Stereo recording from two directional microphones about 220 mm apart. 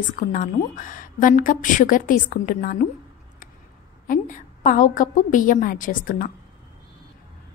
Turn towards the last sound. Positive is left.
turn(degrees=40)  # may be behind; listen again after turning